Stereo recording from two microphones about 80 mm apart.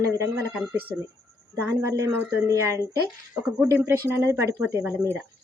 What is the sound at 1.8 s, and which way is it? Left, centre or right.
Speech, right.